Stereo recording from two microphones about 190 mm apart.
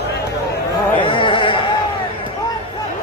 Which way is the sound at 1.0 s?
25° left (ahead or behind).